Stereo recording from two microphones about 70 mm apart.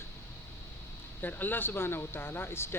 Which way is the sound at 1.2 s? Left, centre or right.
Left.